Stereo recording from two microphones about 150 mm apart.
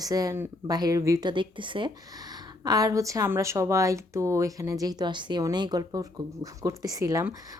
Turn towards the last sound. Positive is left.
turn(degrees=-20)  # may be behind; listen again after turning